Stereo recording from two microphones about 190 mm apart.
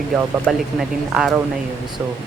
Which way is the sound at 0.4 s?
Centre (ahead or behind).